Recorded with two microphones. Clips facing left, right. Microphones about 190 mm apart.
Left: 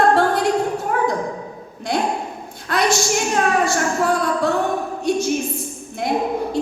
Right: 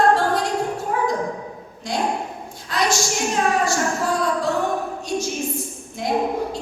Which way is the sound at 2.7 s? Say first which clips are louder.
Left 3 dB; 60° left (ahead or behind).